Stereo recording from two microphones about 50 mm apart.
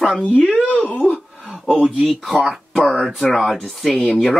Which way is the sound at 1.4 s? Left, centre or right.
Centre.